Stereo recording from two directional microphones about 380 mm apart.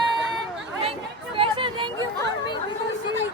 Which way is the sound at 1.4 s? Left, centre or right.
Centre.